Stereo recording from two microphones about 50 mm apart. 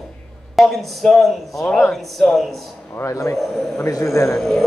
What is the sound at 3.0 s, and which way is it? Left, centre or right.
Speech, left.